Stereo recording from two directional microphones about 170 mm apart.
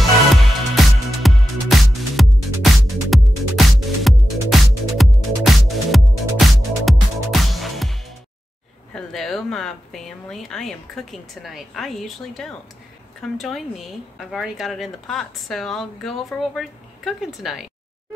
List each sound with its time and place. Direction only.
0.7 s music: centre (ahead or behind)
8.9 s a sound: centre (ahead or behind)
13.2 s speech: centre (ahead or behind)